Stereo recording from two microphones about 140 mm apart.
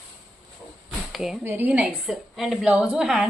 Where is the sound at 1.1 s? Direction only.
5° right (ahead or behind).